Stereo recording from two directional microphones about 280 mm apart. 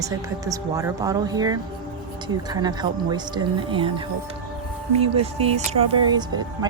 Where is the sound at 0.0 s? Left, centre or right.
Centre.